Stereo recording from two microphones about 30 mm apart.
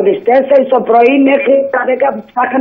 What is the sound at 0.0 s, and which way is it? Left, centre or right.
Speech, centre.